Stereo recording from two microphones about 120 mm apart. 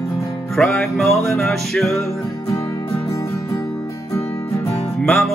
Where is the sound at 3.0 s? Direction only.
25° left (ahead or behind).